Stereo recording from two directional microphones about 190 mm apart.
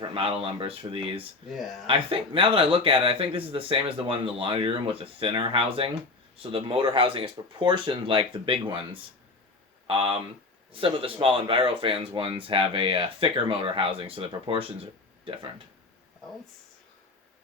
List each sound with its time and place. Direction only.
0.0 s speech: 30° right (ahead or behind)